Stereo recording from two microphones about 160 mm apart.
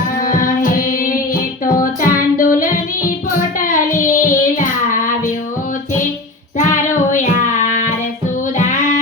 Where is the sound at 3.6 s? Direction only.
55° left (ahead or behind).